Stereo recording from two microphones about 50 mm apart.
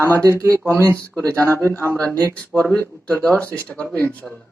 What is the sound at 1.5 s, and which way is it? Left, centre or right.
Speech, left.